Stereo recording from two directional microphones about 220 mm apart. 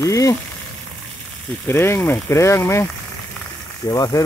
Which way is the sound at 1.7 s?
10° left (ahead or behind).